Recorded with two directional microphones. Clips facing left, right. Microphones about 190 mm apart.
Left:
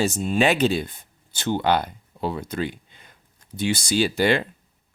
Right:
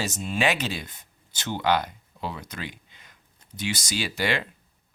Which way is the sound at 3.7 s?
30° left (ahead or behind).